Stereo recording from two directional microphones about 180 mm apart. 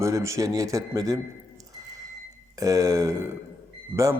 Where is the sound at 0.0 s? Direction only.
15° right (ahead or behind).